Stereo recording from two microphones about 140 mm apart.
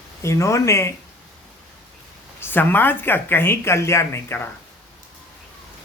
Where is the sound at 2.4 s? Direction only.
15° left (ahead or behind).